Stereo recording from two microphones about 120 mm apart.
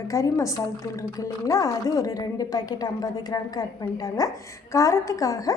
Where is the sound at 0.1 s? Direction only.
25° left (ahead or behind).